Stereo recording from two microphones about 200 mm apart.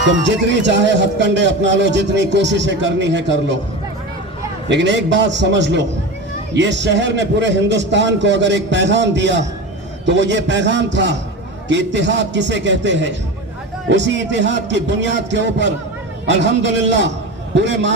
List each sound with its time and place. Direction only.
0.3 s speech: 60° right (ahead or behind)
4.7 s speech: 60° right (ahead or behind)